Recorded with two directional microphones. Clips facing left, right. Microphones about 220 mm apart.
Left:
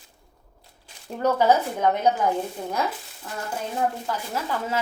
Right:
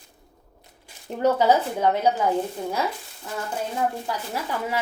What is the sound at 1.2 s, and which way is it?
Speech, 15° right (ahead or behind).